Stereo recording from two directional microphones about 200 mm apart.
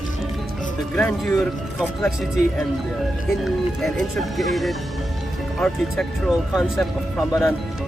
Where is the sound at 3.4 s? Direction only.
Centre (ahead or behind).